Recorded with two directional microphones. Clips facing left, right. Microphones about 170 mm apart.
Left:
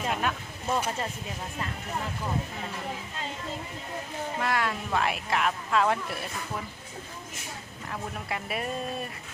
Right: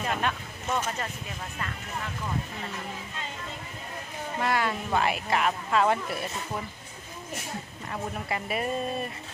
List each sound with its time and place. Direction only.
0.0 s a sound: 5° left (ahead or behind)
0.7 s speech: 30° left (ahead or behind)
4.4 s speech: centre (ahead or behind)
7.9 s speech: centre (ahead or behind)